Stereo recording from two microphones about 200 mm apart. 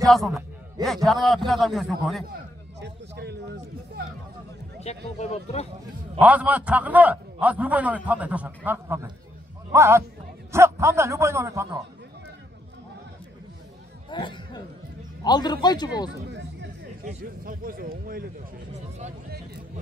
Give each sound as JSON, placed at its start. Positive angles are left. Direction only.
{"t": 0.0, "sound": "a man's voice", "side_deg": 0}
{"t": 2.8, "sound": "a sound", "side_deg": -55}
{"t": 4.8, "sound": "speech", "side_deg": 35}
{"t": 6.1, "sound": "a man's voice", "side_deg": -5}
{"t": 14.1, "sound": "speech", "side_deg": 25}
{"t": 17.0, "sound": "speech", "side_deg": -45}